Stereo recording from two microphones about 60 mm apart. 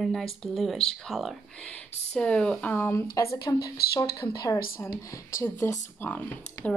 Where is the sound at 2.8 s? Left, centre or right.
Left.